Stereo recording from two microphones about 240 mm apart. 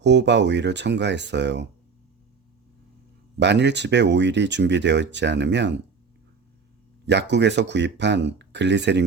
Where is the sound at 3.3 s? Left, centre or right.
Right.